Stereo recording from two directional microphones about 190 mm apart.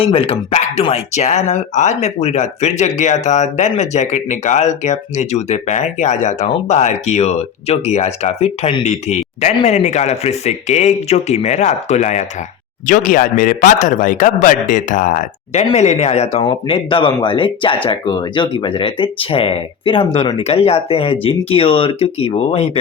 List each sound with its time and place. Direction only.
0.0 s speech: 30° left (ahead or behind)